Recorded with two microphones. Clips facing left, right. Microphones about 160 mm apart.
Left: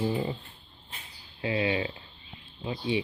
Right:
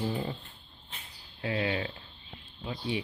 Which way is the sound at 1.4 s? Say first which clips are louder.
Left 3 dB; 15° left (ahead or behind).